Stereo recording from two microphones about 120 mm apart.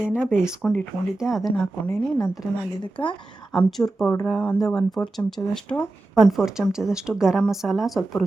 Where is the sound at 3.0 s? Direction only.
15° left (ahead or behind).